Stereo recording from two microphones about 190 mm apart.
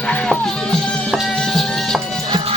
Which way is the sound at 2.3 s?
30° right (ahead or behind).